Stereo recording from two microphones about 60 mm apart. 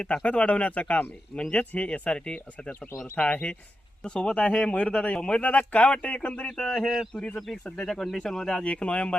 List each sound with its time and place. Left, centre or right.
0.0 s speech: left
6.8 s speech: centre
7.1 s speech: left
7.3 s speech: centre
8.6 s speech: centre